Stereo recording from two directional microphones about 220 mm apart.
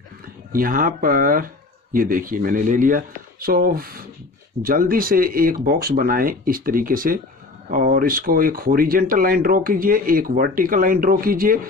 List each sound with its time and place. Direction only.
0.5 s speech: 40° right (ahead or behind)